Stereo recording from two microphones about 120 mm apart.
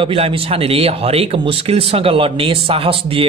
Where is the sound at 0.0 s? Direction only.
50° right (ahead or behind).